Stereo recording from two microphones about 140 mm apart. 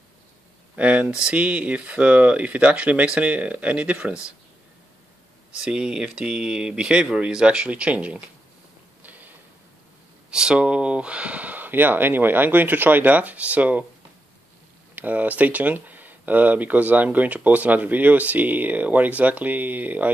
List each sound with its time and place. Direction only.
0.7 s speech: 10° right (ahead or behind)
5.6 s speech: 5° right (ahead or behind)
9.0 s a sound: 10° right (ahead or behind)
10.3 s speech: 5° right (ahead or behind)
15.0 s speech: 10° right (ahead or behind)